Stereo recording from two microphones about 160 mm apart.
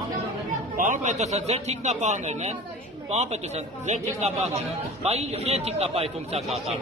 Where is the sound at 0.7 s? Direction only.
55° right (ahead or behind).